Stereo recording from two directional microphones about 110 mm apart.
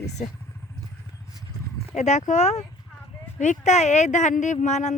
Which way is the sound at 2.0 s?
90° left.